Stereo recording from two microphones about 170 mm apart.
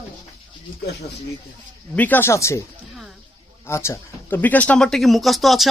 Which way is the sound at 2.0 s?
10° left (ahead or behind).